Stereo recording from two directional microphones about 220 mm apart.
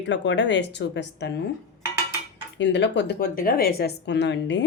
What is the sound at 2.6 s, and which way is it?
Speech, 55° left (ahead or behind).